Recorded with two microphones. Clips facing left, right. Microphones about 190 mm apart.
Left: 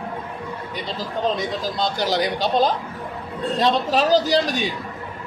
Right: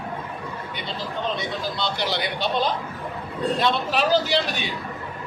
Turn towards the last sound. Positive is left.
turn(degrees=40)  # may be behind; listen again after turning